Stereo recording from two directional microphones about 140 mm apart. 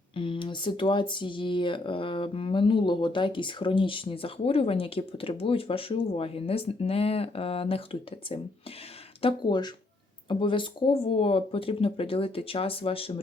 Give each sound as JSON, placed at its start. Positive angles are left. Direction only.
{"t": 0.2, "sound": "speech", "side_deg": 40}
{"t": 9.2, "sound": "speech", "side_deg": 35}